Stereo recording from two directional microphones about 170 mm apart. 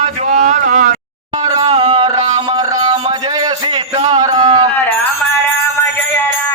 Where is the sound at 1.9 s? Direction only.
30° right (ahead or behind).